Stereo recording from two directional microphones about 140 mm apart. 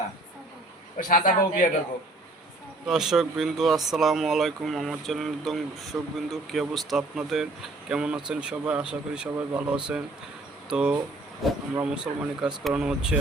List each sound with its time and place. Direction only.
0.9 s a man's voice: 75° left (ahead or behind)
2.8 s speech: 5° right (ahead or behind)